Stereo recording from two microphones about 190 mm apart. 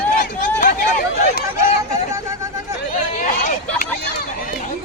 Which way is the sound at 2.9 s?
40° left (ahead or behind).